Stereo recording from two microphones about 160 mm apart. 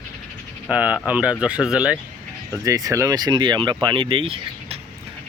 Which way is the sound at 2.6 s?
20° right (ahead or behind).